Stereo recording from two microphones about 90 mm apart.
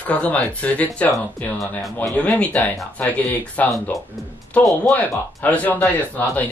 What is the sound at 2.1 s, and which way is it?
Speech, 15° left (ahead or behind).